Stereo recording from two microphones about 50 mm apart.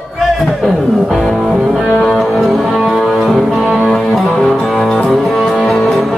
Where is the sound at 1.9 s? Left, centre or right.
Centre.